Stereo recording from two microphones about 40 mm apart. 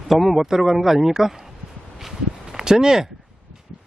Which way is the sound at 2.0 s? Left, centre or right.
Centre.